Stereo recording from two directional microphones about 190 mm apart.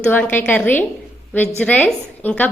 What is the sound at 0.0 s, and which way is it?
A woman's voice, 10° left (ahead or behind).